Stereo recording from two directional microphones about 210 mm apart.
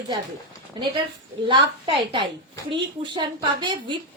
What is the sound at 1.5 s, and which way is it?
A woman's voice, 25° right (ahead or behind).